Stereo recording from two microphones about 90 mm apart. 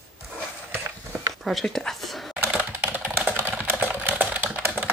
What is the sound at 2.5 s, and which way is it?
Typing, 20° right (ahead or behind).